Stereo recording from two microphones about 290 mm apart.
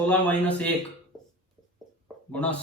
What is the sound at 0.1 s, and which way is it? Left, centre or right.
Speech, centre.